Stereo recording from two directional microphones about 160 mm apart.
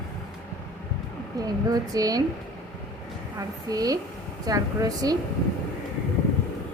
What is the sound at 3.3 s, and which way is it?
A woman's voice, 25° right (ahead or behind).